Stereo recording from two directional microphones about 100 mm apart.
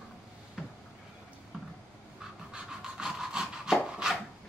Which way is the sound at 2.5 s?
5° right (ahead or behind).